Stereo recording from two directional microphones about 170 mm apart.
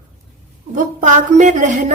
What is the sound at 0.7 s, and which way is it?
A woman's voice, 45° right (ahead or behind).